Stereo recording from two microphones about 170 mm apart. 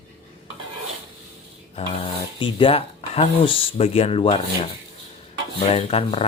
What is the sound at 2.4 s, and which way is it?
Speech, 30° left (ahead or behind).